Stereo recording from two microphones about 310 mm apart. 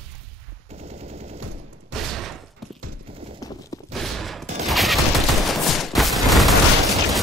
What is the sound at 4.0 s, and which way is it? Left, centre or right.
Fusillade, centre.